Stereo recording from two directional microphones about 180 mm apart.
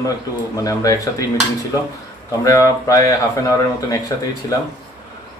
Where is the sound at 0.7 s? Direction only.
20° left (ahead or behind).